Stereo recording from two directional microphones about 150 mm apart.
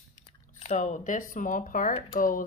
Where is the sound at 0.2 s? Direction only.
55° left (ahead or behind).